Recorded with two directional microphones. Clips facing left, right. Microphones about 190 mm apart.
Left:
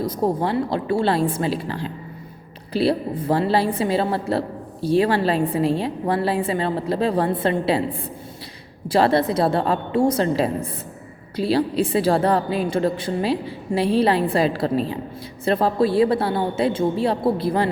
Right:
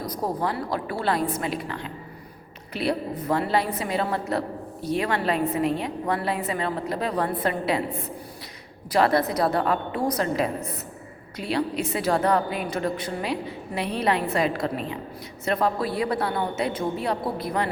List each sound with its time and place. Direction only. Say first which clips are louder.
0.0 s a woman's voice: left 6 dB; 25° left (ahead or behind)